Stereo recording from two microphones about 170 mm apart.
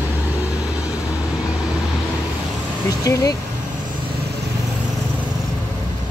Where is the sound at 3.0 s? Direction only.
20° left (ahead or behind).